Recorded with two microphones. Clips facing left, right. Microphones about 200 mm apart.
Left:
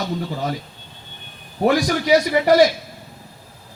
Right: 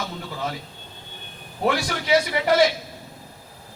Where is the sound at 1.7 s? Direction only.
40° left (ahead or behind).